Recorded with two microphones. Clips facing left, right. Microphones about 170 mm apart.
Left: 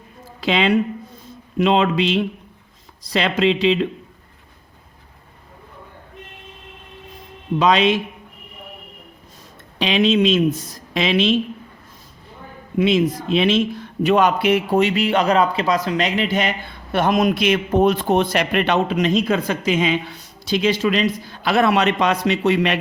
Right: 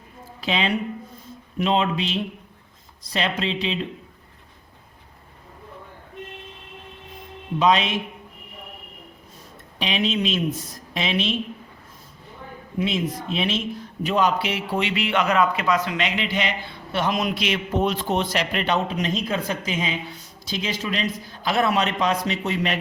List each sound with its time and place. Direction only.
0.4 s speech: 85° left
7.6 s speech: 85° left
9.7 s speech: 80° left
12.8 s a man's voice: 90° left; by 22.8 s 75° left (ahead or behind)